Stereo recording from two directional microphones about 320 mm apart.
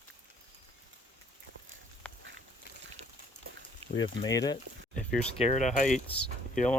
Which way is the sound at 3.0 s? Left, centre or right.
Centre.